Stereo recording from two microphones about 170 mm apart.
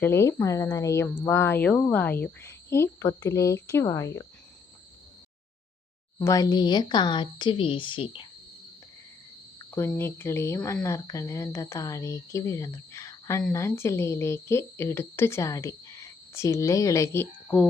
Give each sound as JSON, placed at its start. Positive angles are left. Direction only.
{"t": 0.0, "sound": "speech", "side_deg": 15}
{"t": 6.1, "sound": "speech", "side_deg": 20}
{"t": 9.6, "sound": "speech", "side_deg": 15}